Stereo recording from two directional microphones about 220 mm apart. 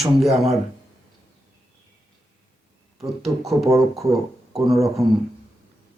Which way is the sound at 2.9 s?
Centre (ahead or behind).